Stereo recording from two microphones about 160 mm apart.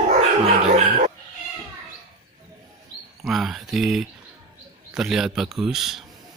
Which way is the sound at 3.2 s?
Centre (ahead or behind).